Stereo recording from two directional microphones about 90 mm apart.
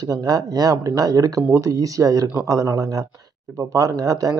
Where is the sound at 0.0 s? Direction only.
45° right (ahead or behind).